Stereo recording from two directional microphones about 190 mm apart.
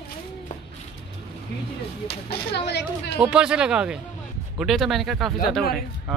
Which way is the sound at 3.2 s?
5° right (ahead or behind).